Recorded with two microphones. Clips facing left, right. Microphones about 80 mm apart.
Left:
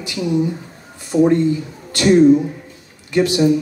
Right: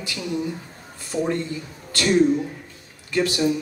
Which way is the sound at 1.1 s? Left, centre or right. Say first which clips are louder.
Left 11 dB; left.